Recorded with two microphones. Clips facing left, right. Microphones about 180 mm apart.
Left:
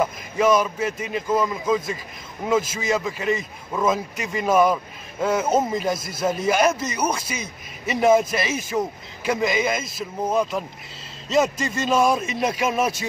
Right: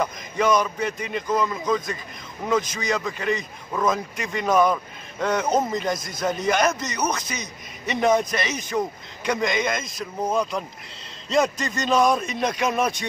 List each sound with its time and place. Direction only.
0.0 s a man's voice: 5° left (ahead or behind)